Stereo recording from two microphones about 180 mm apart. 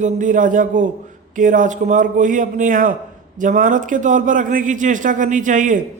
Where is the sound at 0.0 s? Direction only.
45° right (ahead or behind).